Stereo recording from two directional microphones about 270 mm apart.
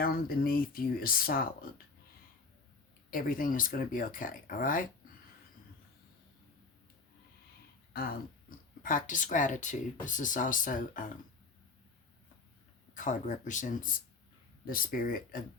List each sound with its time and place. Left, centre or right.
0.0 s speech: left
3.1 s speech: left
7.9 s speech: left
12.9 s speech: left